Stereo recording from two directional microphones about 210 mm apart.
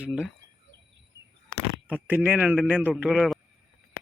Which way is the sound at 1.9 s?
10° right (ahead or behind).